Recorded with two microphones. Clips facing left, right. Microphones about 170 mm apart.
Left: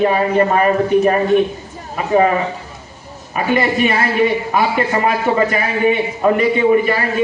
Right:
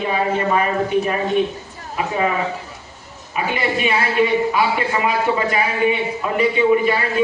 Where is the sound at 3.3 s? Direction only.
55° left (ahead or behind).